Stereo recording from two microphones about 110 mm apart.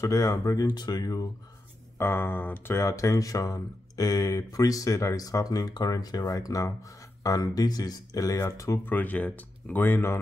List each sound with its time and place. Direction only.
0.0 s speech: 30° left (ahead or behind)
2.0 s speech: 20° left (ahead or behind)